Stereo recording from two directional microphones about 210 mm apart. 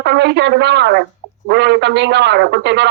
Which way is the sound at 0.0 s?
55° right (ahead or behind).